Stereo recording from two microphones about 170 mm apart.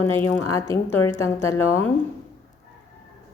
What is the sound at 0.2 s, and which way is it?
A woman's voice, 15° left (ahead or behind).